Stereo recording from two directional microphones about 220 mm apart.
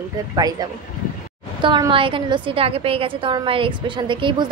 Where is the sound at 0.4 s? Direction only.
15° right (ahead or behind).